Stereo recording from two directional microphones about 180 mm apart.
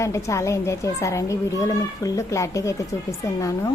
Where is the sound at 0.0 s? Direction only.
15° left (ahead or behind).